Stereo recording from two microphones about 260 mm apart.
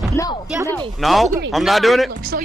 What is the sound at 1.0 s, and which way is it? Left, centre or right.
Speech, centre.